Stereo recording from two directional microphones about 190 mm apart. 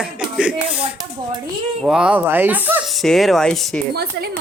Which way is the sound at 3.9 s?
55° right (ahead or behind).